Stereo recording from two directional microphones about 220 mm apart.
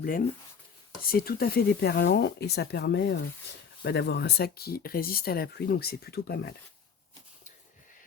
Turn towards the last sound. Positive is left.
turn(degrees=45)  # may be behind; listen again after turning